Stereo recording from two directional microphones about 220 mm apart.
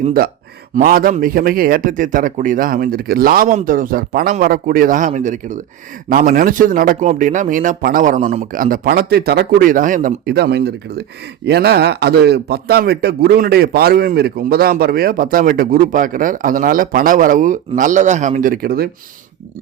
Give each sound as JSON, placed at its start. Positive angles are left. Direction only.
{"t": 0.0, "sound": "a man's voice", "side_deg": -40}